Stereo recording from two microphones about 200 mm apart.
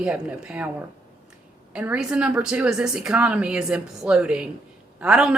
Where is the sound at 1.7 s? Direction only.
5° right (ahead or behind).